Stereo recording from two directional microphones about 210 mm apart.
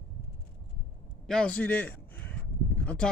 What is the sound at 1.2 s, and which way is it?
A man's voice, 5° left (ahead or behind).